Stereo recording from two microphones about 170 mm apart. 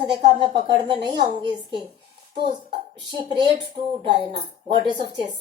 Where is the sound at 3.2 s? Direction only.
30° right (ahead or behind).